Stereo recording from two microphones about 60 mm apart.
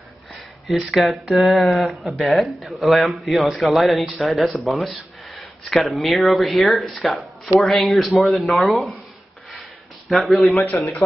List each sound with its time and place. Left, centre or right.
0.7 s speech: centre
10.0 s speech: centre
10.4 s a man's voice: left